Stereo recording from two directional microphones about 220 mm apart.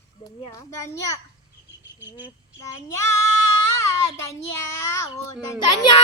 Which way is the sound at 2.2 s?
15° left (ahead or behind).